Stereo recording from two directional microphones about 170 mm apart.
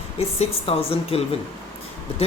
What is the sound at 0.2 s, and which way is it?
Speech, 35° left (ahead or behind).